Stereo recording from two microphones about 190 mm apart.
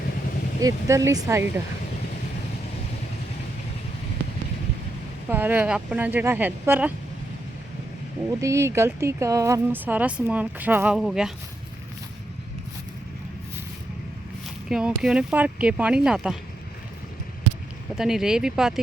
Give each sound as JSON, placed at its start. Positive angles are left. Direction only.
{"t": 0.6, "sound": "speech", "side_deg": -15}
{"t": 5.3, "sound": "speech", "side_deg": -10}
{"t": 8.4, "sound": "speech", "side_deg": -15}
{"t": 14.7, "sound": "speech", "side_deg": -5}
{"t": 17.9, "sound": "speech", "side_deg": 0}